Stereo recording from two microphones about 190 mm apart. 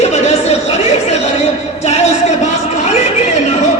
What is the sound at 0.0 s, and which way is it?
Chatter, 35° left (ahead or behind).